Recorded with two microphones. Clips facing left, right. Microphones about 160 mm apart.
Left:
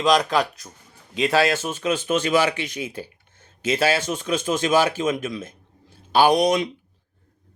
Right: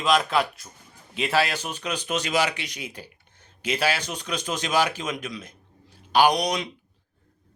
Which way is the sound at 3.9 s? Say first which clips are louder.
Left 7 dB; 45° left (ahead or behind).